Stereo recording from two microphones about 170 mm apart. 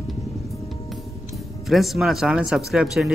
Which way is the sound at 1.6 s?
Centre (ahead or behind).